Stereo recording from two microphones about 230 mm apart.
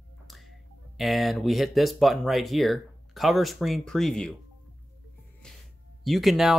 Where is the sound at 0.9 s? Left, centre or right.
Centre.